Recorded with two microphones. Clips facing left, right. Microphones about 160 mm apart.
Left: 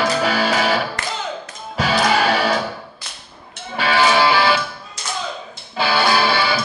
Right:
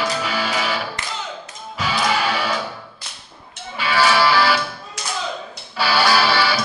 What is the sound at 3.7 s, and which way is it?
Music, 25° left (ahead or behind).